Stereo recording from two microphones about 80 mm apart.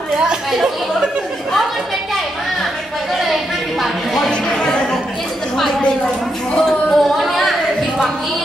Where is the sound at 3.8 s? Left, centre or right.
Centre.